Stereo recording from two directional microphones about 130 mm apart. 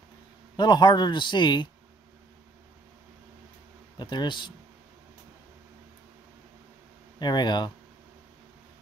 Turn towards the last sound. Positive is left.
turn(degrees=35)  # may be behind; listen again after turning